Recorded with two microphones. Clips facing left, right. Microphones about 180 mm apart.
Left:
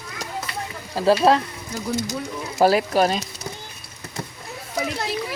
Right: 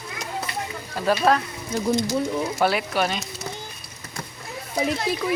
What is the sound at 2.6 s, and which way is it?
Speech, 35° left (ahead or behind).